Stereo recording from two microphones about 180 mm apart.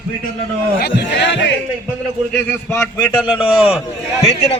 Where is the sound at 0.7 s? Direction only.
70° left (ahead or behind).